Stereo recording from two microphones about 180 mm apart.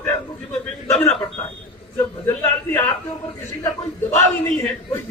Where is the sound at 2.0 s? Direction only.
15° left (ahead or behind).